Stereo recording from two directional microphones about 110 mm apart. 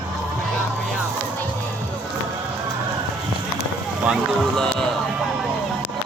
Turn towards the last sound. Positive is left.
turn(degrees=5)  # may be behind; listen again after turning